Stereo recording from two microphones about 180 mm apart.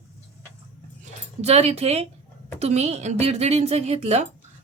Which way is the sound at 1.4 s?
35° right (ahead or behind).